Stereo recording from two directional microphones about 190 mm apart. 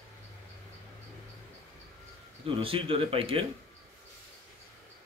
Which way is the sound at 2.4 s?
30° right (ahead or behind).